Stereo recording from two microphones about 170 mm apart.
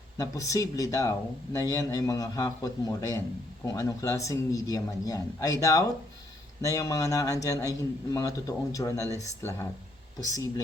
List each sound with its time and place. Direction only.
0.2 s speech: 20° left (ahead or behind)